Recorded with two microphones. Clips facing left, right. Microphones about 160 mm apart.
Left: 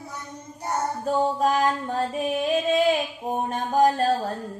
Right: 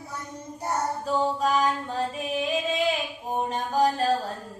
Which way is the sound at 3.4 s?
50° left (ahead or behind).